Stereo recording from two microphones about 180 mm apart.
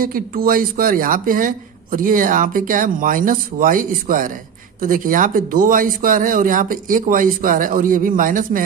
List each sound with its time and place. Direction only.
0.0 s speech: 55° right (ahead or behind)